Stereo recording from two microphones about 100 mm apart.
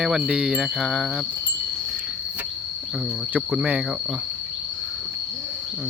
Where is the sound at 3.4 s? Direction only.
10° right (ahead or behind).